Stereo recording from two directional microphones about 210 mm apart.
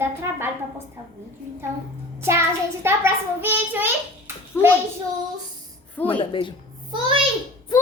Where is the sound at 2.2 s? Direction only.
10° right (ahead or behind).